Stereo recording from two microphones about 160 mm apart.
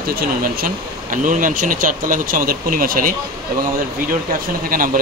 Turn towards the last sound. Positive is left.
turn(degrees=-60)  # may be behind; listen again after turning